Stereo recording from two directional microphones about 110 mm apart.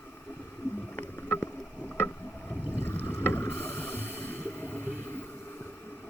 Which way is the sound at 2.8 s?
20° left (ahead or behind).